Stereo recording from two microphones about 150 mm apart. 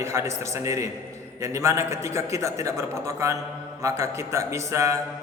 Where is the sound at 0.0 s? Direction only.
20° right (ahead or behind).